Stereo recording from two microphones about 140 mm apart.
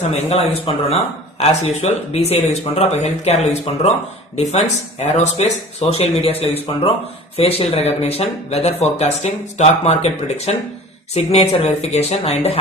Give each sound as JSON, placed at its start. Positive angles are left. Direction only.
{"t": 0.0, "sound": "speech", "side_deg": 50}